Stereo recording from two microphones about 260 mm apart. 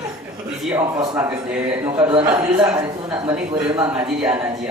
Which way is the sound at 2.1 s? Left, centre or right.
Centre.